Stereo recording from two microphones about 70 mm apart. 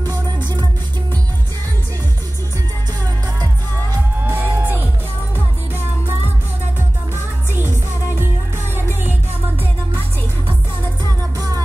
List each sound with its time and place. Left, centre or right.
4.3 s music: right
11.3 s music: right